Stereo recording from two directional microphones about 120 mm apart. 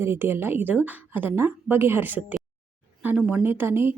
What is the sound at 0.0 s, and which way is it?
Speech, 20° right (ahead or behind).